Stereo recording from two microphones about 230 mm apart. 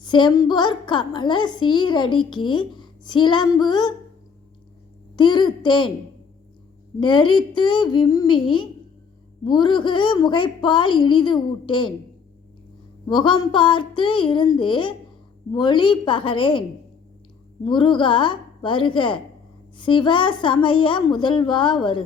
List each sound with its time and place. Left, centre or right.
0.0 s a woman's voice: centre
5.1 s a woman's voice: centre
7.0 s a woman's voice: centre
13.1 s a woman's voice: centre
17.7 s a woman's voice: left